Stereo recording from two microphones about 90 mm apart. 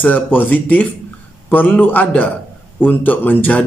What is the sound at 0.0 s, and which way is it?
Speech, 20° left (ahead or behind).